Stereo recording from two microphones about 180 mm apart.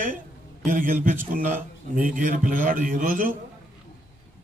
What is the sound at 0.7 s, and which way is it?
A man's voice, 50° right (ahead or behind).